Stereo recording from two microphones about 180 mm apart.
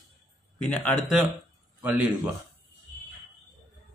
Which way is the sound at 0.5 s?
5° left (ahead or behind).